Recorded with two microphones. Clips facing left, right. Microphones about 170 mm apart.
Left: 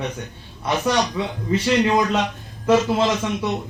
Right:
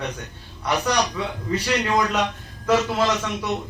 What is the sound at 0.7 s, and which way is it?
A man's voice, 20° left (ahead or behind).